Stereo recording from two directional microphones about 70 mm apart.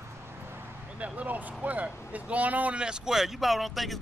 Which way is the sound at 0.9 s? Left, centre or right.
Centre.